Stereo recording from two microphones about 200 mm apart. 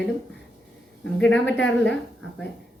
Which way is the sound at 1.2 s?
5° left (ahead or behind).